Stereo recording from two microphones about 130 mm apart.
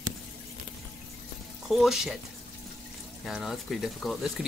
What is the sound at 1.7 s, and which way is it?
Speech, centre (ahead or behind).